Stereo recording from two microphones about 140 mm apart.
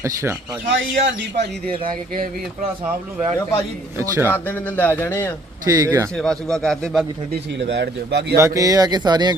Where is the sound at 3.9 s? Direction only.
20° right (ahead or behind).